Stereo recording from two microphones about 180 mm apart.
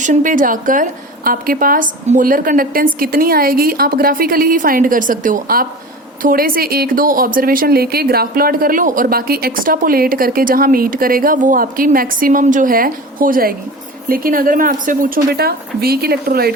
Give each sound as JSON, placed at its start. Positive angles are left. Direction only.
{"t": 0.0, "sound": "speech", "side_deg": -45}